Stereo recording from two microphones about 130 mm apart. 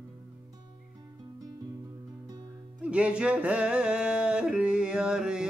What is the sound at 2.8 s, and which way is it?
Speech, 10° right (ahead or behind).